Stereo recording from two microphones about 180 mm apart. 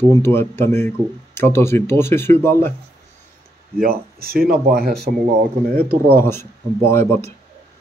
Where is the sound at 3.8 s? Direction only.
55° right (ahead or behind).